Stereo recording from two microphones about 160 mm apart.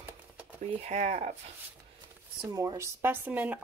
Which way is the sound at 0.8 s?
45° right (ahead or behind).